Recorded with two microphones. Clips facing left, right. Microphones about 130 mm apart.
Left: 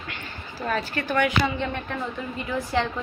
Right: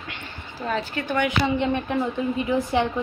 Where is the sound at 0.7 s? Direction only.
20° right (ahead or behind).